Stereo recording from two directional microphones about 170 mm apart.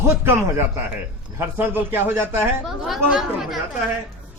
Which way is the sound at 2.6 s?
Centre (ahead or behind).